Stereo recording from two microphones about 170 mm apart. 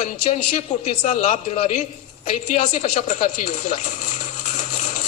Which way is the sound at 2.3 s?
45° left (ahead or behind).